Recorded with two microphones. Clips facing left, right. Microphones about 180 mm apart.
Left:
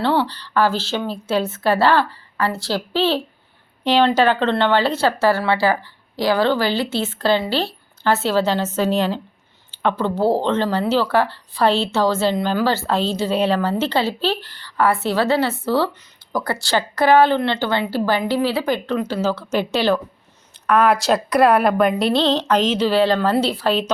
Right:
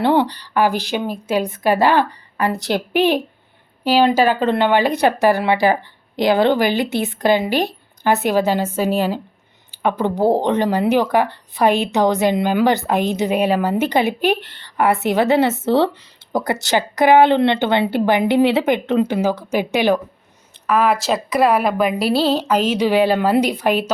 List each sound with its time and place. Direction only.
0.0 s a woman's voice: 15° right (ahead or behind)
20.7 s speech: centre (ahead or behind)